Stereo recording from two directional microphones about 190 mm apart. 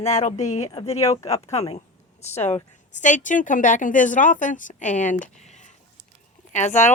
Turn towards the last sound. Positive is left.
turn(degrees=40)  # may be behind; listen again after turning